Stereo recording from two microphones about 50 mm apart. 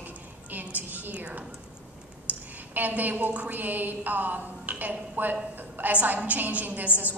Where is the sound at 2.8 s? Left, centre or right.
Right.